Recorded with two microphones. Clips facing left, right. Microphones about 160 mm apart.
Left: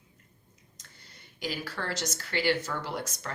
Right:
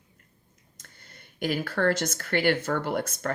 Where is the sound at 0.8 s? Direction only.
55° right (ahead or behind).